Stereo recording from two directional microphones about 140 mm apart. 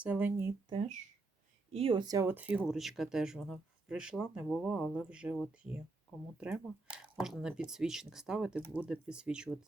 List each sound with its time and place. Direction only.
0.0 s speech: 15° right (ahead or behind)
1.7 s speech: 40° right (ahead or behind)
2.2 s speech: 15° right (ahead or behind)
2.6 s speech: centre (ahead or behind)